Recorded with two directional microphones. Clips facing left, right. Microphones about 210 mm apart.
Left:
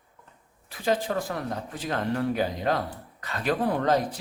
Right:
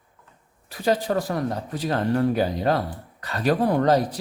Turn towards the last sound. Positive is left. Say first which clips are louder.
# right 4 dB
turn(degrees=-35)  # may be behind; listen again after turning